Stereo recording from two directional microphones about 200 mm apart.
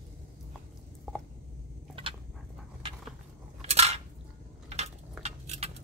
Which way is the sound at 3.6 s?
30° right (ahead or behind).